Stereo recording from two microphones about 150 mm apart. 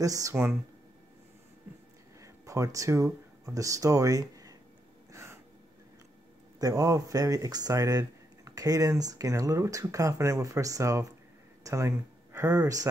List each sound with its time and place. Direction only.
0.0 s speech: 20° right (ahead or behind)
2.1 s speech: 20° right (ahead or behind)
5.1 s a sound: 20° right (ahead or behind)
6.6 s speech: 20° right (ahead or behind)